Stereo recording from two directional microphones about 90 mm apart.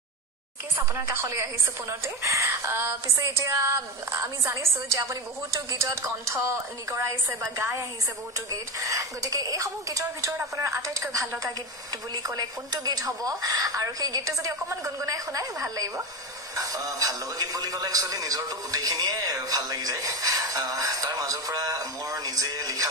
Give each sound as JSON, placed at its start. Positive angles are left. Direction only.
{"t": 0.7, "sound": "a woman's voice", "side_deg": -25}
{"t": 12.1, "sound": "a woman's voice", "side_deg": -45}